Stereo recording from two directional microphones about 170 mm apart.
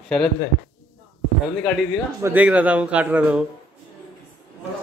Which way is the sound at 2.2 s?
10° right (ahead or behind).